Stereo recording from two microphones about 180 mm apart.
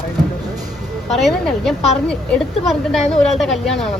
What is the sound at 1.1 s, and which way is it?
A woman's voice, centre (ahead or behind).